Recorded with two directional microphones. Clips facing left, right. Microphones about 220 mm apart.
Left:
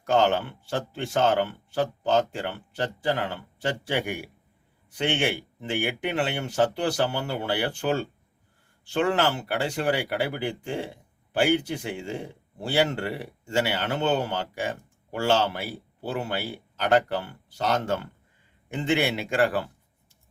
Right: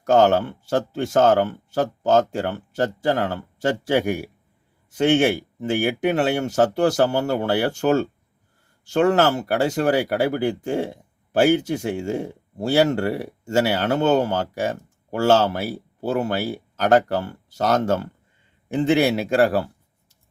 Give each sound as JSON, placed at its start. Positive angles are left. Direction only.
{"t": 0.0, "sound": "a man's voice", "side_deg": -40}